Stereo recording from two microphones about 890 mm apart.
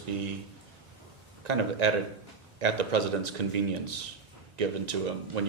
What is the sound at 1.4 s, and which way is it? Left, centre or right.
Speech, right.